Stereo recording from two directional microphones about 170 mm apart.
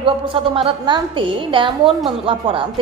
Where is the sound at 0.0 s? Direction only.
30° right (ahead or behind).